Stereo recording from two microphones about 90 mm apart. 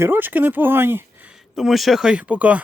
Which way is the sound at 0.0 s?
20° right (ahead or behind).